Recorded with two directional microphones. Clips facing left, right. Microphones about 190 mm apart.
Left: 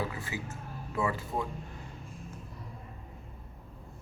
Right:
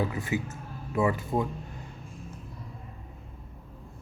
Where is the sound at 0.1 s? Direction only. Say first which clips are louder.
Right 8 dB; 20° right (ahead or behind).